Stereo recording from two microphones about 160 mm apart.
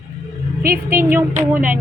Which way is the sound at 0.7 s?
15° right (ahead or behind).